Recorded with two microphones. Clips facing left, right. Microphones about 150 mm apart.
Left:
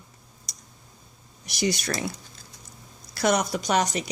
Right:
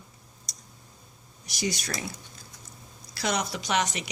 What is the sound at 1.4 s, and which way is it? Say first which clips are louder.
Speech: left 5 dB; 65° left (ahead or behind).